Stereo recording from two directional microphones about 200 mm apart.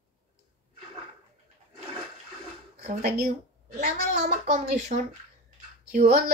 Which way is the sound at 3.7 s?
35° right (ahead or behind).